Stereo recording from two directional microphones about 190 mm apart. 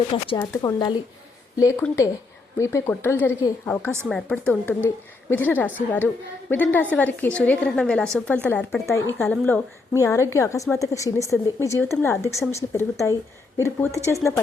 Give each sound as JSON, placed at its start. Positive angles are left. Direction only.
{"t": 0.1, "sound": "speech", "side_deg": 30}
{"t": 2.6, "sound": "a woman's voice", "side_deg": 15}